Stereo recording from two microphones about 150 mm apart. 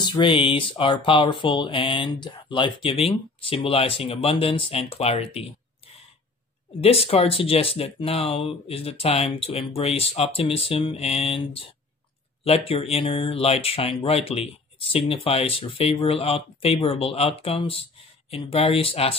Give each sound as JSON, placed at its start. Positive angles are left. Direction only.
{"t": 0.0, "sound": "speech", "side_deg": 30}
{"t": 6.8, "sound": "speech", "side_deg": 40}